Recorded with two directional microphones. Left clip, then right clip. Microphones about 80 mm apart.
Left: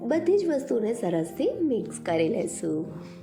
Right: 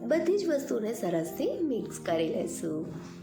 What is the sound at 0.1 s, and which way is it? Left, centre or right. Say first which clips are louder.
Speech: left 3 dB; left.